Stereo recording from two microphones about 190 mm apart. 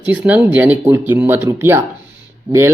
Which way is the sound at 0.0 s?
10° right (ahead or behind).